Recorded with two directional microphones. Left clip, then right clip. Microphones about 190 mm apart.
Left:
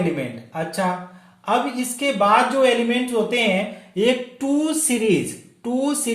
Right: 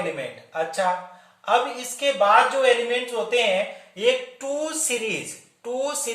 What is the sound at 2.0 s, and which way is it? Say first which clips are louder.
Speech: even; 35° left (ahead or behind).